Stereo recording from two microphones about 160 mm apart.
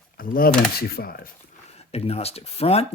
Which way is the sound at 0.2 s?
65° left (ahead or behind).